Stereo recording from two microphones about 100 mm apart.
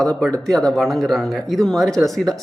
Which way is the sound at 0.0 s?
5° left (ahead or behind).